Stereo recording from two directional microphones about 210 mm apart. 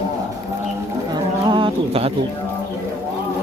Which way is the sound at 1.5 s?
20° right (ahead or behind).